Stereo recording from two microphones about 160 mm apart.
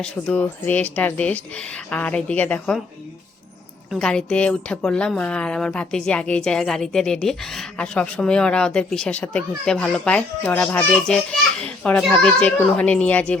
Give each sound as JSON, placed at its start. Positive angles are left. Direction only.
{"t": 0.0, "sound": "speech", "side_deg": 10}
{"t": 3.9, "sound": "a woman's voice", "side_deg": 5}